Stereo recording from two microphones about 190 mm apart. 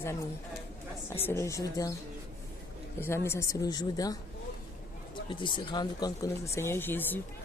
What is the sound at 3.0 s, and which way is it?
A woman's voice, 10° left (ahead or behind).